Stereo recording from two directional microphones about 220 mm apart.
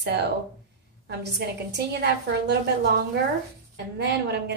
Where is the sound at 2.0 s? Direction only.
50° right (ahead or behind).